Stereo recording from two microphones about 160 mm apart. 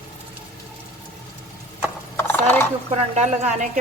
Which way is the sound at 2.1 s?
10° left (ahead or behind).